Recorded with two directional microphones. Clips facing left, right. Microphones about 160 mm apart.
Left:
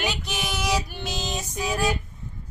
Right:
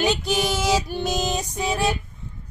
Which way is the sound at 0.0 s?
30° right (ahead or behind).